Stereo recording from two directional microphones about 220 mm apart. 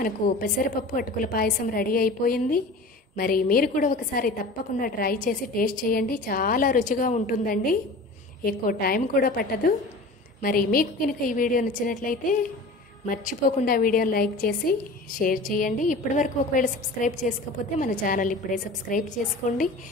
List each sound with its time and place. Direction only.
0.6 s a woman's voice: 40° left (ahead or behind)